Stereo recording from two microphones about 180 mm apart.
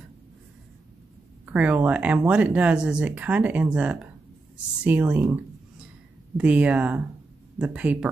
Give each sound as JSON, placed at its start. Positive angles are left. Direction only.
{"t": 1.4, "sound": "speech", "side_deg": -10}